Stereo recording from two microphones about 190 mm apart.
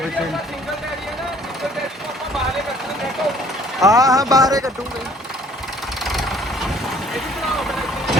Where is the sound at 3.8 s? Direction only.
15° right (ahead or behind).